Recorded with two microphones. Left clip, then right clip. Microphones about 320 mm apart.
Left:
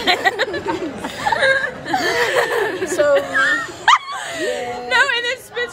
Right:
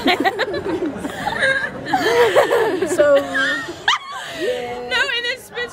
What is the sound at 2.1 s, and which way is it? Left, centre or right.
Laughter, right.